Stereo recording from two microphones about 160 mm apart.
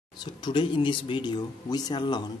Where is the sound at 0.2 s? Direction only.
30° left (ahead or behind).